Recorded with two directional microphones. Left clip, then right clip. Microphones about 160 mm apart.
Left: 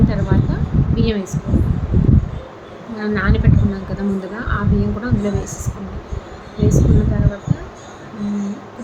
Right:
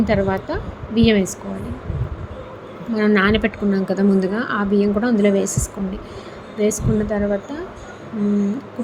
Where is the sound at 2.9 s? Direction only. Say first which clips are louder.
Right 5 dB; 45° right (ahead or behind).